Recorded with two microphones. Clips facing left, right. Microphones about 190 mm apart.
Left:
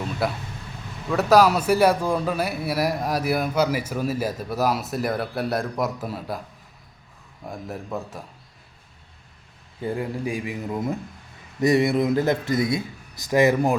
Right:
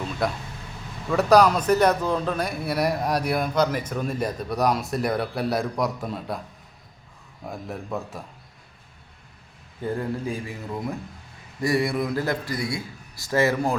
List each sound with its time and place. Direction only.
0.2 s a man's voice: 5° left (ahead or behind)
7.4 s a man's voice: centre (ahead or behind)
9.8 s a man's voice: 10° left (ahead or behind)